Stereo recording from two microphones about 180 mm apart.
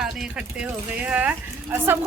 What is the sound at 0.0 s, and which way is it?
A woman's voice, centre (ahead or behind).